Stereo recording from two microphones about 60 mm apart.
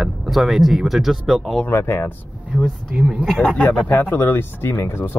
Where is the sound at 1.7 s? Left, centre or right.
Left.